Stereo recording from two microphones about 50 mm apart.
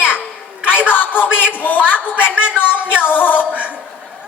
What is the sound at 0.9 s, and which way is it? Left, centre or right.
Speech, left.